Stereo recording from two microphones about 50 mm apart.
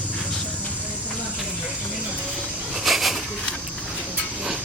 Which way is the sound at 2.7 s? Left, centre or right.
Centre.